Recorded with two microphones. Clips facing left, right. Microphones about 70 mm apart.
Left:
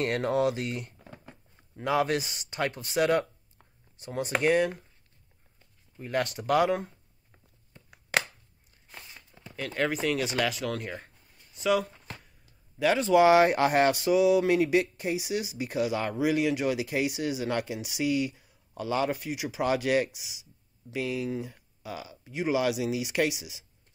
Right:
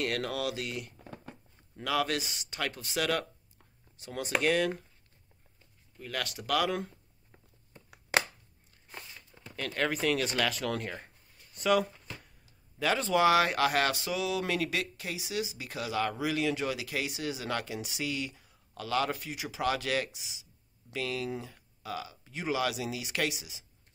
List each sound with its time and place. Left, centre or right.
0.0 s speech: left
0.9 s a sound: centre
1.6 s speech: left
5.9 s speech: left
9.6 s speech: centre
13.2 s speech: left